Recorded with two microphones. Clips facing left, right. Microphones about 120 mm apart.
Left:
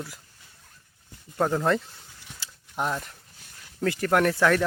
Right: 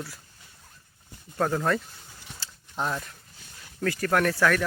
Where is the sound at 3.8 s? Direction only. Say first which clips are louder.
Left 2 dB; 20° left (ahead or behind).